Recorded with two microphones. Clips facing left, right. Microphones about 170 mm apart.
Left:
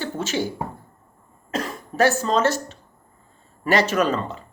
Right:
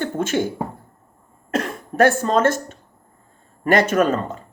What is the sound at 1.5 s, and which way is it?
Speech, 55° right (ahead or behind).